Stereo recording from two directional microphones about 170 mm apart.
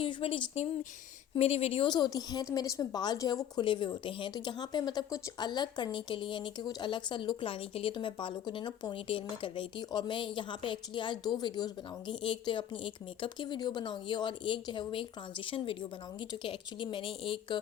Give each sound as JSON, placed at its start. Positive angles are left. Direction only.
{"t": 0.0, "sound": "a woman's voice", "side_deg": 30}